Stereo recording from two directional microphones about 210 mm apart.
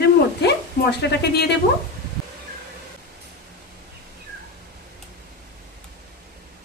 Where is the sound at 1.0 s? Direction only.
50° left (ahead or behind).